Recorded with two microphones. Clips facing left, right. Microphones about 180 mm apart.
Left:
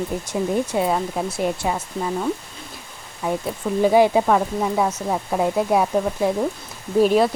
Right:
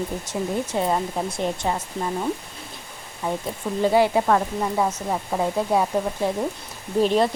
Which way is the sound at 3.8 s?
15° left (ahead or behind).